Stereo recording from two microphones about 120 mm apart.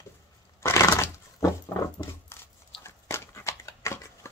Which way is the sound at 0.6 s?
20° left (ahead or behind).